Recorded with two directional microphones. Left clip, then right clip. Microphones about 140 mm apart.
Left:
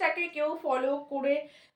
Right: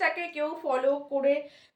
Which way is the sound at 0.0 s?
30° right (ahead or behind).